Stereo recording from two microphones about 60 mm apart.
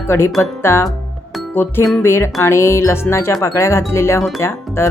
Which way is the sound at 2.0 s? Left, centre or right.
Left.